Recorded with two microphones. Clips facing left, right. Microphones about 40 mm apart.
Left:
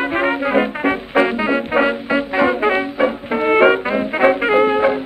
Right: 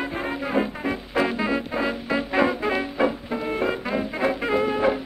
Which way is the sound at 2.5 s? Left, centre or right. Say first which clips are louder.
Left 8 dB; left.